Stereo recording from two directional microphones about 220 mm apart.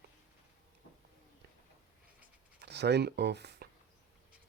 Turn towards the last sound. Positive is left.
turn(degrees=-50)  # may be behind; listen again after turning